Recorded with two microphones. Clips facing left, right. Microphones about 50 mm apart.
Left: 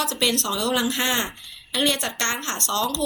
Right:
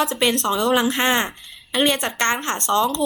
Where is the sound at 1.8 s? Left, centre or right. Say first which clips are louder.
Right 4 dB; right.